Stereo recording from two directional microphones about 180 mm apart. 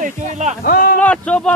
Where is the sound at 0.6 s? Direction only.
55° left (ahead or behind).